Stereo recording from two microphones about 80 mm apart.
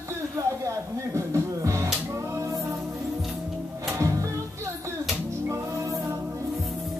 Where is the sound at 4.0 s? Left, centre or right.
Right.